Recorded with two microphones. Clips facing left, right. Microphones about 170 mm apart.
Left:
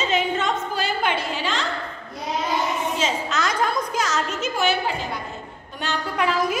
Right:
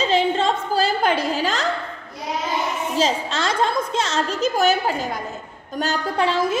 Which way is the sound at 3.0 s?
30° right (ahead or behind).